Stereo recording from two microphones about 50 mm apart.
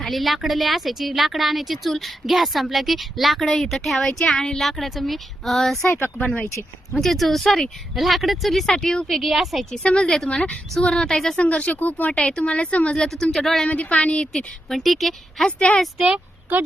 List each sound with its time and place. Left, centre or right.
0.0 s speech: centre
6.9 s speech: centre
9.0 s speech: centre
9.7 s a woman's voice: centre
11.3 s speech: left
12.2 s speech: centre
13.3 s speech: centre
13.7 s speech: left
14.7 s speech: centre
15.4 s speech: left
16.0 s speech: centre